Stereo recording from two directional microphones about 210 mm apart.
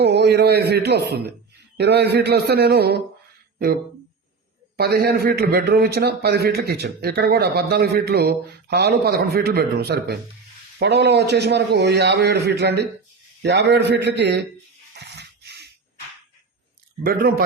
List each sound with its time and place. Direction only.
0.0 s a man's voice: 50° right (ahead or behind)
4.8 s a man's voice: 50° right (ahead or behind)
14.9 s a sound: 55° right (ahead or behind)
17.0 s a man's voice: 45° right (ahead or behind)